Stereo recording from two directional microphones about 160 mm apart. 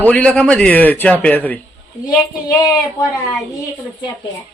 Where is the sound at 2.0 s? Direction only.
25° left (ahead or behind).